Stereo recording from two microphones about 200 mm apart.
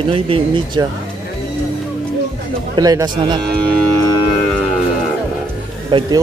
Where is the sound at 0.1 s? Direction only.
30° right (ahead or behind).